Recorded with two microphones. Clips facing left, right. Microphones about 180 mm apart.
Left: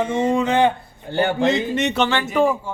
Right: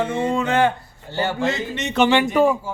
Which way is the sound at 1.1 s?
55° left (ahead or behind).